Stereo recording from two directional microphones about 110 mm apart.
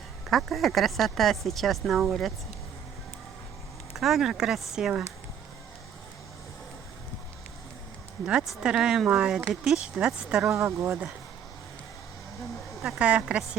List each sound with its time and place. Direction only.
0.3 s speech: centre (ahead or behind)
3.9 s speech: centre (ahead or behind)
8.3 s speech: 5° right (ahead or behind)
10.5 s speech: 25° right (ahead or behind)
12.8 s speech: 5° right (ahead or behind)